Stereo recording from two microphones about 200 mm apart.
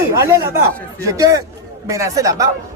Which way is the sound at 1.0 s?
15° right (ahead or behind).